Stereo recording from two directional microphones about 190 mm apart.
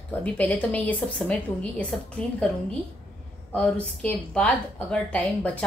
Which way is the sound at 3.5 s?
5° left (ahead or behind).